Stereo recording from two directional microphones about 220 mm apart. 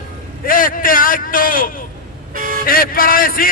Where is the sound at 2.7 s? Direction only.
40° left (ahead or behind).